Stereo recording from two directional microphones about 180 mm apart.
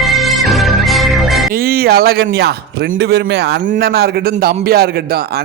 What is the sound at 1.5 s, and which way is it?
A man's voice, 55° right (ahead or behind).